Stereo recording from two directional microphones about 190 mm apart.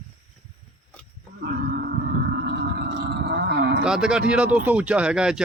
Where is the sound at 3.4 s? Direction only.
65° right (ahead or behind).